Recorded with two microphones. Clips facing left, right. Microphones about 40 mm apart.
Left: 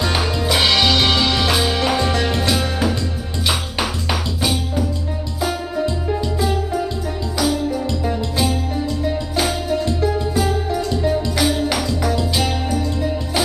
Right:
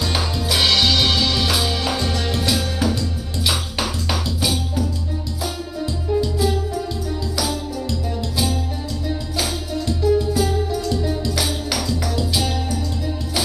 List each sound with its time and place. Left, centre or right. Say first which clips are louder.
0.0 s music: left 3 dB; centre
5.8 s music: right 1 dB; left
6.2 s music: left 1 dB; centre
9.7 s music: left 1 dB; left
10.1 s music: even; centre